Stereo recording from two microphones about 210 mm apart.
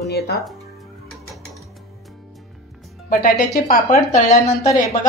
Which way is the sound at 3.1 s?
40° left (ahead or behind).